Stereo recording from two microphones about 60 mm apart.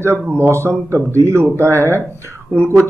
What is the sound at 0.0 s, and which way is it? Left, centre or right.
Speech, right.